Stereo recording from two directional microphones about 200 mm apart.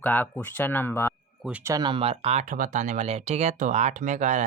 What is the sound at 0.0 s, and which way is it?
Speech, 10° left (ahead or behind).